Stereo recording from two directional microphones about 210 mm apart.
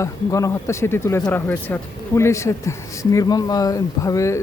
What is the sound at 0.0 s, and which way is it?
Speech, 15° left (ahead or behind).